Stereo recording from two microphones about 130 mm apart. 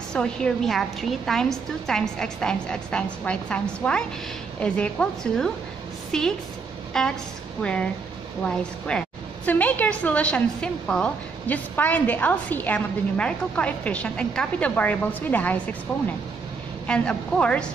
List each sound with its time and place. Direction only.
0.1 s a woman's voice: 5° left (ahead or behind)
16.8 s a woman's voice: 5° left (ahead or behind)